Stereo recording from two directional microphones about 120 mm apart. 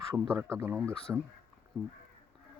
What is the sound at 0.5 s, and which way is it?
Speech, 20° right (ahead or behind).